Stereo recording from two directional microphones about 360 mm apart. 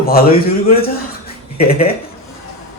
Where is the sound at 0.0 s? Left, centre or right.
Left.